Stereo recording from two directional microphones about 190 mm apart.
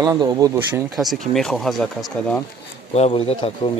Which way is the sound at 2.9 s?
30° left (ahead or behind).